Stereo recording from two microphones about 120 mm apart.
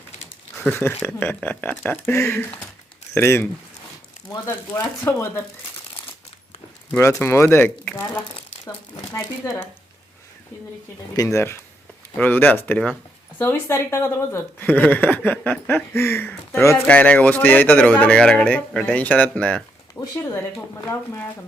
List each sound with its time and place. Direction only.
0.7 s speech: 20° left (ahead or behind)
6.9 s speech: 20° left (ahead or behind)
9.1 s speech: 20° left (ahead or behind)
11.2 s speech: 25° left (ahead or behind)
20.0 s speech: 20° left (ahead or behind)